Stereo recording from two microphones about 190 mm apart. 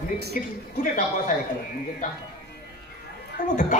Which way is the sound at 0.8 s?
45° left (ahead or behind).